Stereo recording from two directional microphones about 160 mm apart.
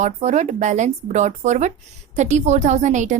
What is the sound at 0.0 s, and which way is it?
A woman's voice, 45° right (ahead or behind).